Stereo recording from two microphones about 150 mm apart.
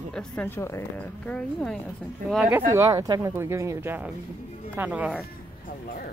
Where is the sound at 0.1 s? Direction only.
5° left (ahead or behind).